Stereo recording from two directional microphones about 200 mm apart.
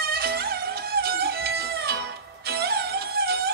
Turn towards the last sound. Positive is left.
turn(degrees=-50)  # may be behind; listen again after turning